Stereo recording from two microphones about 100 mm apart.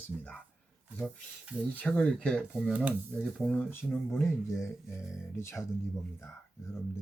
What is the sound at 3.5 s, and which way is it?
Speech, 20° left (ahead or behind).